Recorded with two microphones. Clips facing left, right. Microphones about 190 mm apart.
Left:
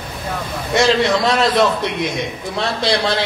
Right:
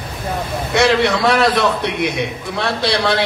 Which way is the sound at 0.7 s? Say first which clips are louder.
Even; 65° right (ahead or behind).